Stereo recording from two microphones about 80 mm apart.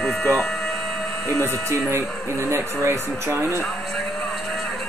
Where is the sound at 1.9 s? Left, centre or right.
Right.